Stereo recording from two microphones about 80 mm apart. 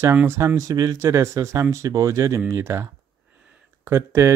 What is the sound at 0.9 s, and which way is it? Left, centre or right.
Speech, right.